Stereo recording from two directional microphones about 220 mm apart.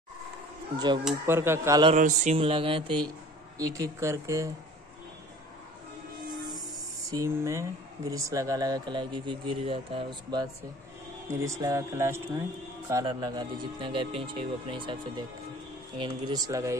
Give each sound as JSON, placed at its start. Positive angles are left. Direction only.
{"t": 1.0, "sound": "speech", "side_deg": -10}
{"t": 2.0, "sound": "speech", "side_deg": -35}
{"t": 7.1, "sound": "speech", "side_deg": -15}